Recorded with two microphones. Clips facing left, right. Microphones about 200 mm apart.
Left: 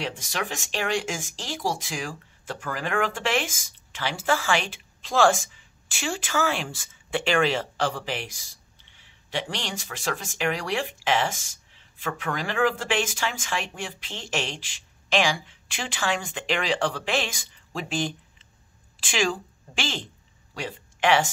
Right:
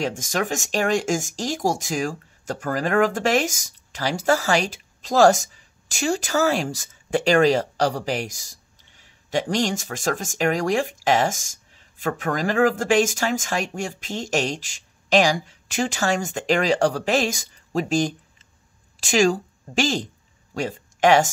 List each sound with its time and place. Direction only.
0.0 s speech: 45° right (ahead or behind)